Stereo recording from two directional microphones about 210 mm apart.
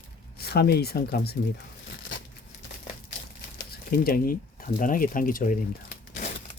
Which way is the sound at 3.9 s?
45° left (ahead or behind).